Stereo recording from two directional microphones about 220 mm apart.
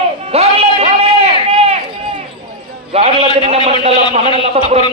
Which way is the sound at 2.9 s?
30° right (ahead or behind).